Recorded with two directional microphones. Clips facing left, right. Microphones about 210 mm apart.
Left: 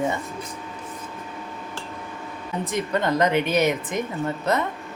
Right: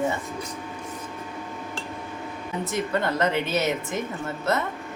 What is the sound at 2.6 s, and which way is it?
A woman's voice, 15° left (ahead or behind).